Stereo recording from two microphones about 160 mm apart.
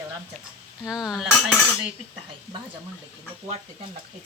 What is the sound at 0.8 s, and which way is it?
Speech, 5° right (ahead or behind).